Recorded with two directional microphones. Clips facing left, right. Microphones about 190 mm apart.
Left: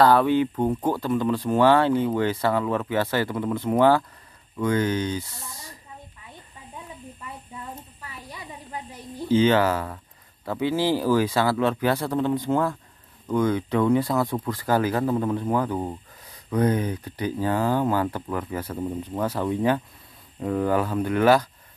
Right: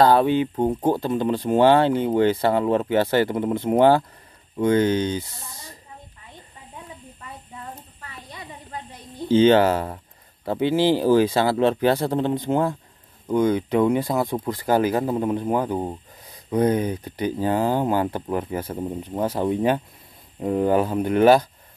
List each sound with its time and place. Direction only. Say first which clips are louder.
0.0 s speech: right 1 dB; 20° right (ahead or behind)
9.3 s speech: right 4 dB; 25° right (ahead or behind)